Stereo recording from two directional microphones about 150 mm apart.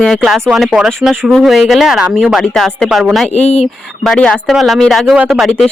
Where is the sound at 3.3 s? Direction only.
45° left (ahead or behind).